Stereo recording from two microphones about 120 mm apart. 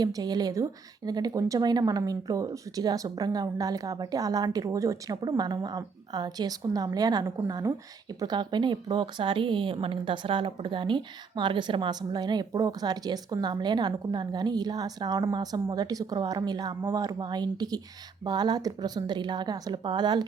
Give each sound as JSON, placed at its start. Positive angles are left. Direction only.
{"t": 0.0, "sound": "speech", "side_deg": -35}